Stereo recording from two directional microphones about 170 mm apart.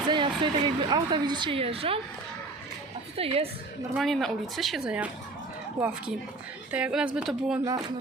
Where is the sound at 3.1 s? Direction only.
35° right (ahead or behind).